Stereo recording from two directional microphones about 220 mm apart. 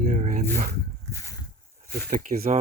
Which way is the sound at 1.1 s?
10° left (ahead or behind).